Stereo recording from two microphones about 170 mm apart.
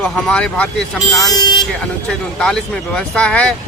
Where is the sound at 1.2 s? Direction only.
25° left (ahead or behind).